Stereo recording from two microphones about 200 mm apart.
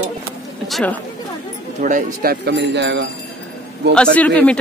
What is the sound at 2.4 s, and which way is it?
Speech, 60° right (ahead or behind).